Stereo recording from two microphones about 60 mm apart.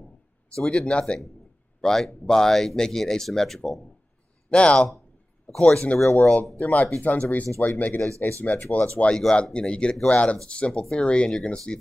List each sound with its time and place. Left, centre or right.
0.6 s speech: centre
4.5 s speech: centre